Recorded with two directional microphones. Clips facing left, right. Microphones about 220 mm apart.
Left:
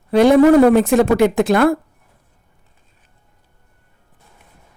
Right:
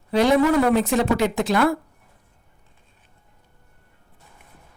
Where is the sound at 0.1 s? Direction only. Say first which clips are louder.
Left 8 dB; 55° left (ahead or behind).